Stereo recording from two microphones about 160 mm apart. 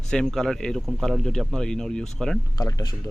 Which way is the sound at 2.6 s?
20° left (ahead or behind).